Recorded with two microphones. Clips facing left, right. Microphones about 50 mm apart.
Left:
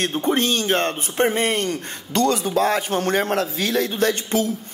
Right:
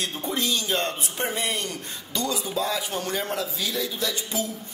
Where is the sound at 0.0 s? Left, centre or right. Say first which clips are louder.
Left 8 dB; left.